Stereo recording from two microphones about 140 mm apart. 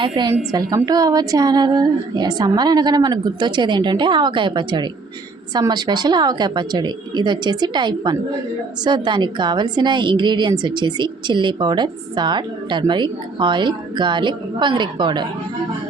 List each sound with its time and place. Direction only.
0.2 s a woman's voice: 35° right (ahead or behind)